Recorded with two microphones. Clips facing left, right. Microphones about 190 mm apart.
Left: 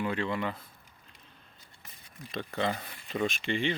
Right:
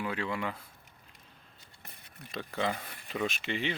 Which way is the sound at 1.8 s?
60° right (ahead or behind).